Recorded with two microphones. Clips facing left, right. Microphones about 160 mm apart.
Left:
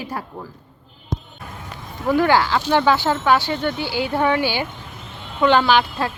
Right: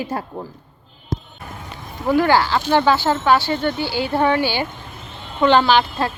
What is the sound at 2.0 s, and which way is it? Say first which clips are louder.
Speech: right 1 dB; 15° right (ahead or behind).